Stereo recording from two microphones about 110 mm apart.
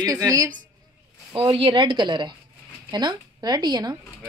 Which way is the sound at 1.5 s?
50° right (ahead or behind).